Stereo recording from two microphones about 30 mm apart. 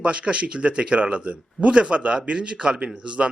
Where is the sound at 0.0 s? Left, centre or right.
Right.